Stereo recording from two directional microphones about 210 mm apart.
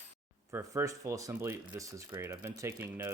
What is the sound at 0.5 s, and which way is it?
Speech, 15° right (ahead or behind).